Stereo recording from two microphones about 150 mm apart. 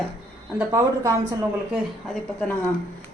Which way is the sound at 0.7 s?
15° right (ahead or behind).